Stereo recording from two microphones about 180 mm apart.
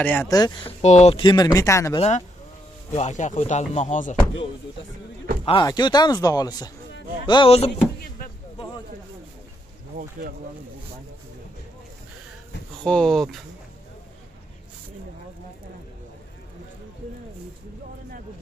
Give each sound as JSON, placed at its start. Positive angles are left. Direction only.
{"t": 0.0, "sound": "speech", "side_deg": 10}
{"t": 0.3, "sound": "speech", "side_deg": 25}
{"t": 1.2, "sound": "speech", "side_deg": 20}
{"t": 2.0, "sound": "speech", "side_deg": 35}
{"t": 5.4, "sound": "speech", "side_deg": 25}
{"t": 12.8, "sound": "speech", "side_deg": 5}